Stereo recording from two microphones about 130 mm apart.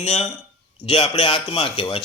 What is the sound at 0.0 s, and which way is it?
Speech, 55° left (ahead or behind).